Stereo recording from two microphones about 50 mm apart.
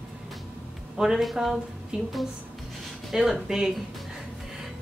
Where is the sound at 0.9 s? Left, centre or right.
Centre.